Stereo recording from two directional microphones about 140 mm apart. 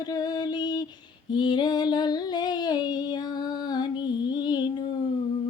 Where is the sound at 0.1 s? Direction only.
30° left (ahead or behind).